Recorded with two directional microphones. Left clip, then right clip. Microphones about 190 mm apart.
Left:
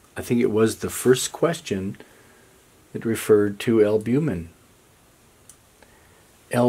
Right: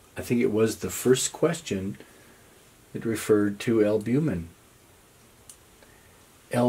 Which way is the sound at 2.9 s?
20° left (ahead or behind).